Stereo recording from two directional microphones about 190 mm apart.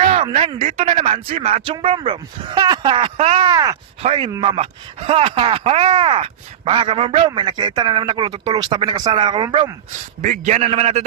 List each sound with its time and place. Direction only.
0.1 s speech: 30° right (ahead or behind)
4.0 s a man's voice: 30° right (ahead or behind)
10.2 s a man's voice: 40° right (ahead or behind)